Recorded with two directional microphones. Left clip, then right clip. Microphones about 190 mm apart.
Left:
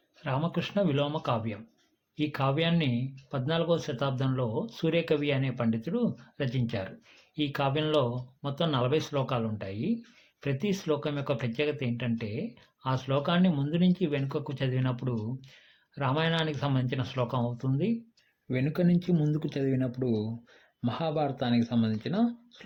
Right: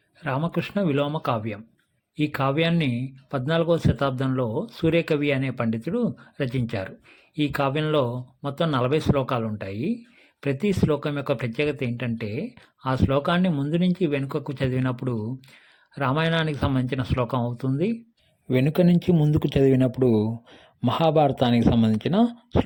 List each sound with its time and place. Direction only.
0.2 s speech: 35° right (ahead or behind)